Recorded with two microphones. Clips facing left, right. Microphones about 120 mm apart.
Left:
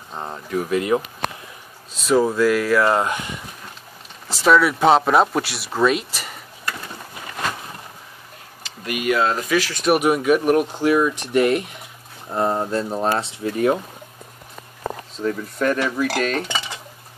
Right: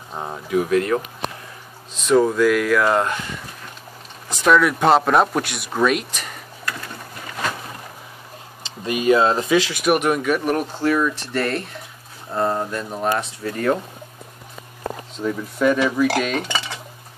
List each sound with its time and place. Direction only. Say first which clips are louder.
0.1 s speech: right 3 dB; 5° right (ahead or behind)
2.0 s speech: right 1 dB; 5° left (ahead or behind)
4.4 s speech: even; 5° left (ahead or behind)
8.6 s speech: right 4 dB; 25° right (ahead or behind)
9.9 s speech: left 6 dB; 5° left (ahead or behind)
12.7 s speech: left 2 dB; 30° left (ahead or behind)
15.1 s speech: even; 5° right (ahead or behind)